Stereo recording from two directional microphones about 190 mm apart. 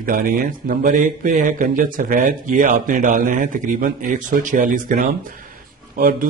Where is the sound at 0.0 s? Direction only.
50° right (ahead or behind).